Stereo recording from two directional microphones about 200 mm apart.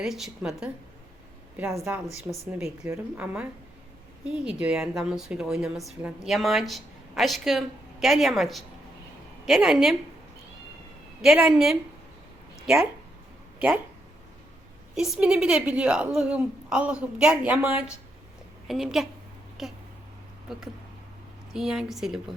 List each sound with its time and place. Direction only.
0.0 s a woman's voice: centre (ahead or behind)
1.5 s speech: 15° right (ahead or behind)
2.0 s a woman's voice: 15° left (ahead or behind)
2.5 s a woman's voice: 5° right (ahead or behind)
11.2 s a woman's voice: centre (ahead or behind)
14.9 s a woman's voice: centre (ahead or behind)